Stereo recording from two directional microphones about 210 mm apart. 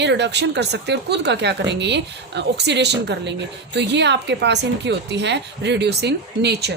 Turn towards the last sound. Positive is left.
turn(degrees=-50)  # may be behind; listen again after turning